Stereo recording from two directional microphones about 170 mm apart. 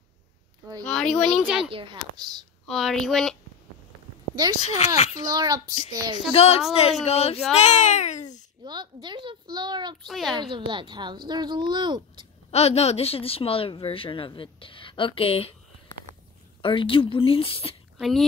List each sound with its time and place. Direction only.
0.8 s speech: 5° left (ahead or behind)
1.6 s a child's voice: 30° right (ahead or behind)
2.6 s speech: centre (ahead or behind)
4.6 s speech: 40° left (ahead or behind)
5.2 s a child's voice: 20° right (ahead or behind)
6.3 s a child's voice: 40° left (ahead or behind)
8.6 s a child's voice: 25° right (ahead or behind)
10.0 s speech: centre (ahead or behind)
10.5 s a child's voice: 30° right (ahead or behind)
12.4 s speech: 40° left (ahead or behind)
16.6 s speech: 30° left (ahead or behind)
17.9 s speech: centre (ahead or behind)